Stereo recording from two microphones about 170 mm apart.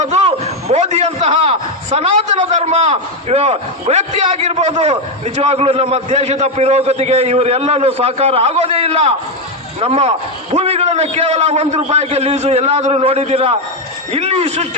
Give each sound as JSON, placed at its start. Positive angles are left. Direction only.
{"t": 0.0, "sound": "a man's voice", "side_deg": -40}